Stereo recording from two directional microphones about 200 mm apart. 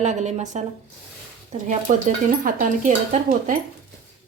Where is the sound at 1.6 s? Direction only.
40° right (ahead or behind).